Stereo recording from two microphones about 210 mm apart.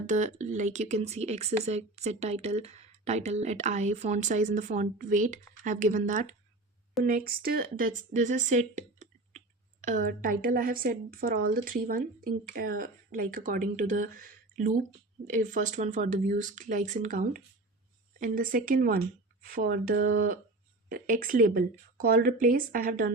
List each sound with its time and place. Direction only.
0.1 s speech: 35° right (ahead or behind)